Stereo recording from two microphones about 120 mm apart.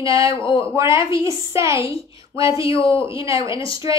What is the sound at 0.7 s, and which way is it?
Speech, 25° right (ahead or behind).